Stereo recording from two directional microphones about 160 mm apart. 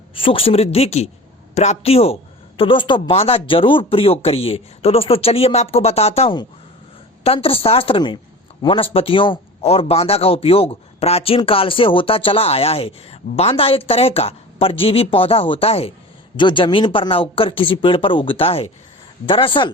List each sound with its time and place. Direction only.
0.1 s a man's voice: 35° left (ahead or behind)